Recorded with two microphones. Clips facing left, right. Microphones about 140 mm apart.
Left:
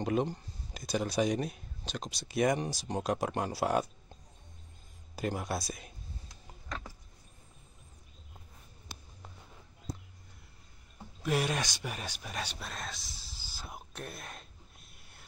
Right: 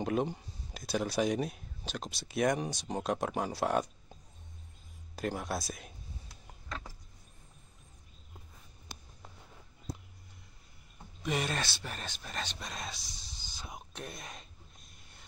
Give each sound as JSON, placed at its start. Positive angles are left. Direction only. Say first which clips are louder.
{"t": 0.0, "sound": "speech", "louder": "left 1 dB", "side_deg": -5}
{"t": 5.1, "sound": "speech", "louder": "left 1 dB", "side_deg": 0}
{"t": 11.2, "sound": "speech", "louder": "left 2 dB", "side_deg": 5}